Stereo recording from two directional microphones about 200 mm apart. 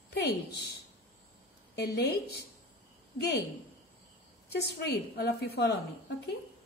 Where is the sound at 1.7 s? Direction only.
55° left (ahead or behind).